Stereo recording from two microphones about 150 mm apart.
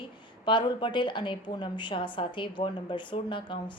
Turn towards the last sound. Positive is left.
turn(degrees=35)  # may be behind; listen again after turning